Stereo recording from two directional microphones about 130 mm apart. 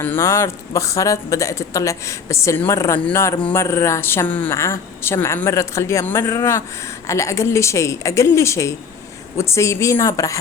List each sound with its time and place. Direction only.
0.0 s a woman's voice: 15° left (ahead or behind)